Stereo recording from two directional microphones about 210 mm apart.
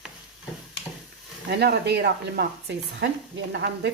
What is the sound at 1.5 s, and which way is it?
A woman's voice, 50° right (ahead or behind).